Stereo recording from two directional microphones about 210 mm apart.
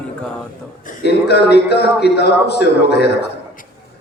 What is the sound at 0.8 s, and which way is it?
A man's voice, 45° left (ahead or behind).